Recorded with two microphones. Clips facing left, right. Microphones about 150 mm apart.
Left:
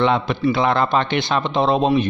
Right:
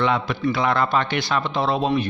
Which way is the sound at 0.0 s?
25° left (ahead or behind).